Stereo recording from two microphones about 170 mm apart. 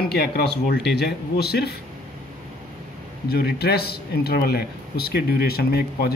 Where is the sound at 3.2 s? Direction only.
70° left (ahead or behind).